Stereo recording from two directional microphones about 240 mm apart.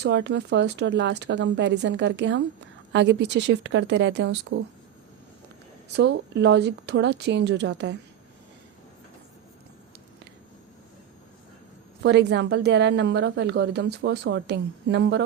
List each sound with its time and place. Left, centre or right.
0.0 s a woman's voice: right
5.9 s a woman's voice: right
12.0 s a woman's voice: right